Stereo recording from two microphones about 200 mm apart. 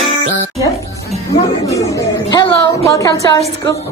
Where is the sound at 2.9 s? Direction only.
20° left (ahead or behind).